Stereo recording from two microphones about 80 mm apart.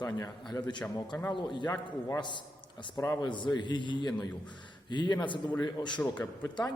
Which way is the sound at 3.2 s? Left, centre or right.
Left.